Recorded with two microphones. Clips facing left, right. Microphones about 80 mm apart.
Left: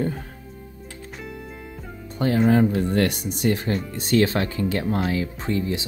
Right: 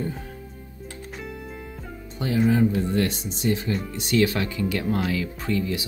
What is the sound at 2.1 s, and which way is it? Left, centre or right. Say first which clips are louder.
Speech: left 3 dB; left.